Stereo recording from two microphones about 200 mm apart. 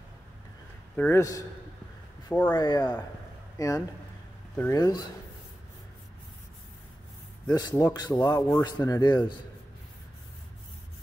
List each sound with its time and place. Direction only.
0.9 s speech: 10° left (ahead or behind)
7.5 s speech: 20° left (ahead or behind)